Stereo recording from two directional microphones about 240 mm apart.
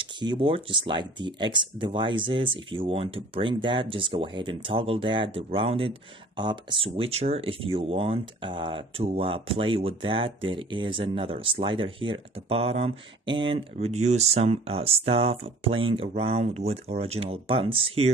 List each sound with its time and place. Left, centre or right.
0.0 s speech: centre